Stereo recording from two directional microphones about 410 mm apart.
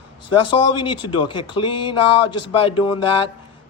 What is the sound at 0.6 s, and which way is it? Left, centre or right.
Speech, left.